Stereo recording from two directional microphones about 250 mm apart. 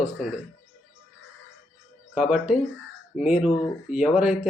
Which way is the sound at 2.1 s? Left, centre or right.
Centre.